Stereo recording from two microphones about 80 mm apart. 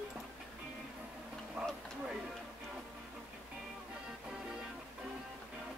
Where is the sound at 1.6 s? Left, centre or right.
Centre.